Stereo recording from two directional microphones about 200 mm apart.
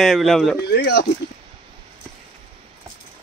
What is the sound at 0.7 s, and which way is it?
Speech, 55° left (ahead or behind).